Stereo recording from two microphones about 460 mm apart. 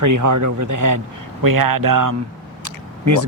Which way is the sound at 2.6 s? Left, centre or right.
Right.